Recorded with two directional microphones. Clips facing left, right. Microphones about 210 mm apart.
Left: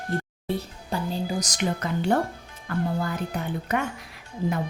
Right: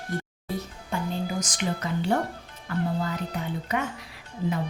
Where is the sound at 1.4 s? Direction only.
40° left (ahead or behind).